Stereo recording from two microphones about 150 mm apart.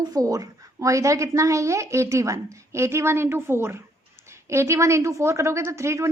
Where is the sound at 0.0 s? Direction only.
25° right (ahead or behind).